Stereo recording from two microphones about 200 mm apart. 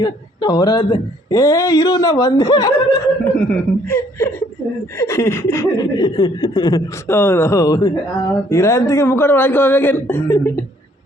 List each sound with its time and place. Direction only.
0.0 s speech: 20° left (ahead or behind)